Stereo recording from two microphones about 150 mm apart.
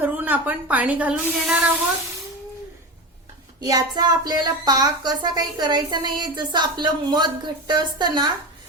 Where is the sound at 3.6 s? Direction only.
25° right (ahead or behind).